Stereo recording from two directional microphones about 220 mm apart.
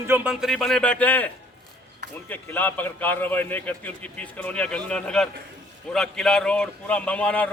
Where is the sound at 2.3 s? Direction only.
10° left (ahead or behind).